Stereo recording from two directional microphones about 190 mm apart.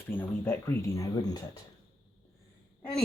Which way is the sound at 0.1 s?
10° left (ahead or behind).